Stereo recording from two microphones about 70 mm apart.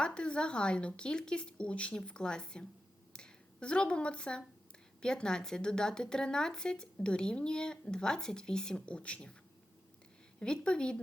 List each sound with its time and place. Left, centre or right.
0.0 s speech: centre
10.4 s speech: centre